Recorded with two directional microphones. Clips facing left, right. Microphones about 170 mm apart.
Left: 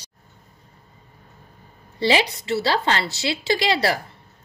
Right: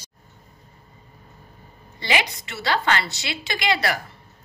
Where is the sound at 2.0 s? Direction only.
30° left (ahead or behind).